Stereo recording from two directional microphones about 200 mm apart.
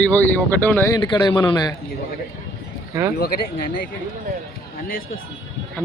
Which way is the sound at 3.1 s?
45° left (ahead or behind).